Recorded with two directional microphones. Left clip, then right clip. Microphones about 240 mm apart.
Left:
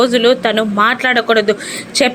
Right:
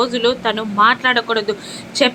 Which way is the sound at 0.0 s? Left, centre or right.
Centre.